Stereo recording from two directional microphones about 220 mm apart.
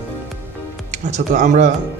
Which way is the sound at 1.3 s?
35° right (ahead or behind).